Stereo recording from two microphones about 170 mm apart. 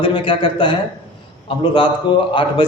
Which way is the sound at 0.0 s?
30° left (ahead or behind).